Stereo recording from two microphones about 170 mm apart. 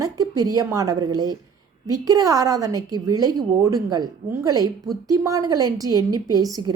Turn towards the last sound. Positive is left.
turn(degrees=-25)  # may be behind; listen again after turning